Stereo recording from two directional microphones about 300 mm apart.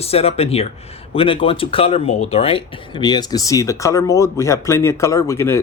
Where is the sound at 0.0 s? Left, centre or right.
Centre.